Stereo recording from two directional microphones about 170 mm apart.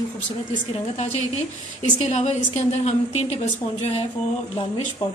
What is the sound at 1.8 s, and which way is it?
A woman's voice, 40° left (ahead or behind).